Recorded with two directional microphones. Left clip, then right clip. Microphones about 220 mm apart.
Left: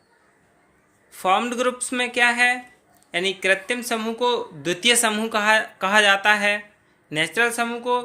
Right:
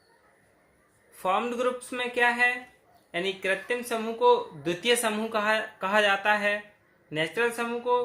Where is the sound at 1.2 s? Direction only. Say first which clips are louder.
Left 6 dB; 40° left (ahead or behind).